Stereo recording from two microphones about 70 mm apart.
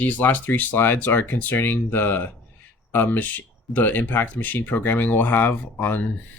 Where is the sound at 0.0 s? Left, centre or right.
Left.